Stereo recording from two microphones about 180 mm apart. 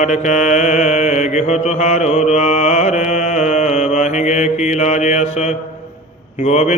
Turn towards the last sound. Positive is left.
turn(degrees=40)  # may be behind; listen again after turning